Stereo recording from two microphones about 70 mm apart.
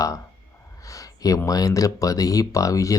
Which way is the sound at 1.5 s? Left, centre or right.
Left.